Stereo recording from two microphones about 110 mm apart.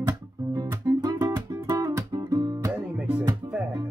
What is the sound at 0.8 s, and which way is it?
Music, 35° right (ahead or behind).